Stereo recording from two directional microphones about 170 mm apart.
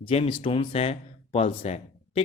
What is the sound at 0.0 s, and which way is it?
Speech, 30° left (ahead or behind).